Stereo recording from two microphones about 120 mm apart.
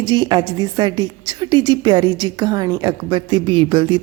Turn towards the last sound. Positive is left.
turn(degrees=-45)  # may be behind; listen again after turning